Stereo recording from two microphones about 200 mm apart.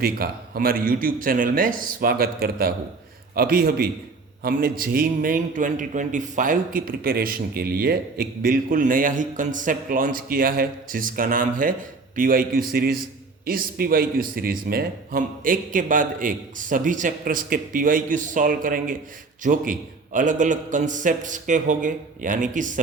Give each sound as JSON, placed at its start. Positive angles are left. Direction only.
{"t": 0.0, "sound": "a man's voice", "side_deg": -50}